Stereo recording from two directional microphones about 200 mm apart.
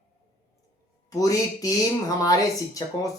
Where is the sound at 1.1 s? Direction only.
15° left (ahead or behind).